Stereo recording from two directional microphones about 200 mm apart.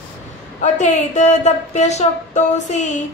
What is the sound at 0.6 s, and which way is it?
A man's voice, 35° left (ahead or behind).